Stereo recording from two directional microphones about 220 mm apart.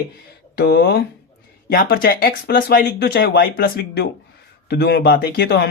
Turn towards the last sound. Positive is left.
turn(degrees=45)  # may be behind; listen again after turning